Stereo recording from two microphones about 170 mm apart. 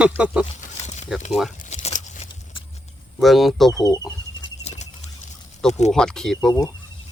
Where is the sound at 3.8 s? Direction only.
25° left (ahead or behind).